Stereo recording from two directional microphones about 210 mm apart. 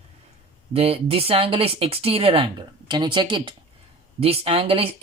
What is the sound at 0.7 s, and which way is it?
Speech, 25° right (ahead or behind).